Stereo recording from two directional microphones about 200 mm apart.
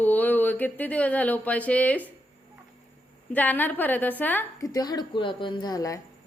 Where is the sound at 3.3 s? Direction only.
10° left (ahead or behind).